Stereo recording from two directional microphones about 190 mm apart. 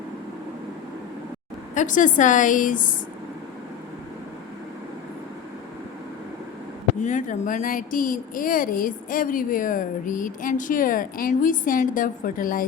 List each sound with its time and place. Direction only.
1.7 s speech: 40° left (ahead or behind)
7.0 s speech: 40° left (ahead or behind)